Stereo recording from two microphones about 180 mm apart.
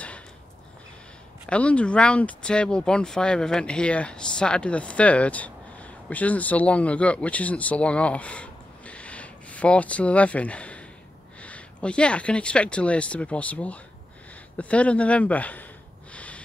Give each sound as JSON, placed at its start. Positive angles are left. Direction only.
{"t": 1.5, "sound": "speech", "side_deg": 5}
{"t": 16.1, "sound": "snort", "side_deg": 5}